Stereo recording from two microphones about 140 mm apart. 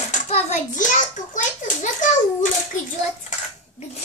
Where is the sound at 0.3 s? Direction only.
60° left (ahead or behind).